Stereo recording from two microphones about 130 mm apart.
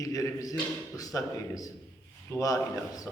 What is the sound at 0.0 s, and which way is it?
A man's voice, 25° left (ahead or behind).